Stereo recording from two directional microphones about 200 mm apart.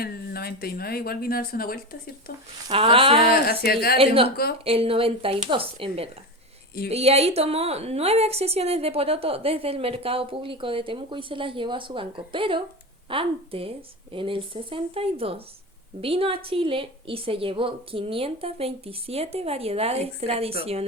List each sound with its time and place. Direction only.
0.0 s speech: 50° left (ahead or behind)
2.6 s a woman's voice: 25° right (ahead or behind)
3.2 s speech: 50° left (ahead or behind)
3.9 s a woman's voice: 30° right (ahead or behind)